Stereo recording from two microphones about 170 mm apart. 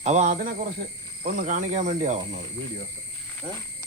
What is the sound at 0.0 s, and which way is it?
Speech, 45° right (ahead or behind).